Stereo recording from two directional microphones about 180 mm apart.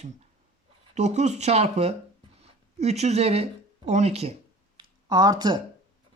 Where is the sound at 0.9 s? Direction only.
40° right (ahead or behind).